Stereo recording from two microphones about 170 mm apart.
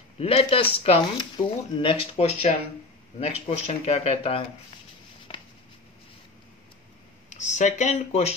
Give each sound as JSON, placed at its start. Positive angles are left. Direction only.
{"t": 0.2, "sound": "speech", "side_deg": 35}
{"t": 5.3, "sound": "a sound", "side_deg": 35}
{"t": 7.2, "sound": "speech", "side_deg": 45}